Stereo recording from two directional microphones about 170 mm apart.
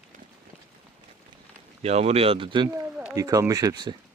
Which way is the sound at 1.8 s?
35° right (ahead or behind).